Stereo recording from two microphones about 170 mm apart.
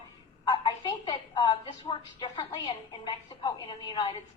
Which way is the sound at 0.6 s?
25° left (ahead or behind).